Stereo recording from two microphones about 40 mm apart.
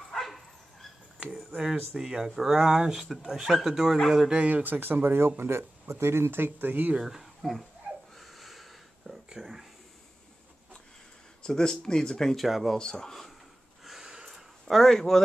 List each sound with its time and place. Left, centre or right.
0.1 s dog: centre
1.6 s speech: centre
3.4 s speech: centre
4.5 s speech: right
4.7 s speech: right
5.4 s speech: right
7.0 s speech: centre
8.2 s a sound: centre
11.4 s speech: centre
12.4 s speech: centre
12.7 s speech: left
13.8 s a sound: centre
14.8 s speech: centre